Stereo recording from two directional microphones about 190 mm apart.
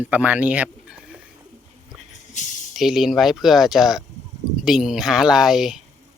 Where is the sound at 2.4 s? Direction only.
40° left (ahead or behind).